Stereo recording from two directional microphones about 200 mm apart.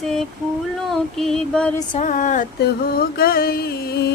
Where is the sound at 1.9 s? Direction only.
40° left (ahead or behind).